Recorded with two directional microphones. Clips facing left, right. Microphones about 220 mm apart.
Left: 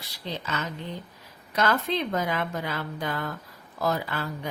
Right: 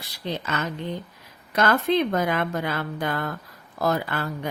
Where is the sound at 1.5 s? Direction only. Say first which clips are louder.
Right 5 dB; 55° right (ahead or behind).